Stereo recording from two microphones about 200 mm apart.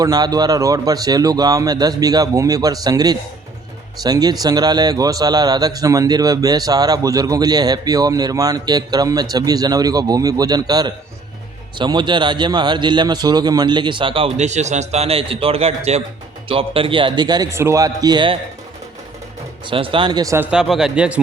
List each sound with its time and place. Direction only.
0.0 s a man's voice: 20° right (ahead or behind)
19.6 s speech: 25° right (ahead or behind); by 21.2 s 5° right (ahead or behind)